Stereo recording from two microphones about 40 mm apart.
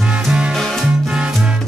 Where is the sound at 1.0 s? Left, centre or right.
Right.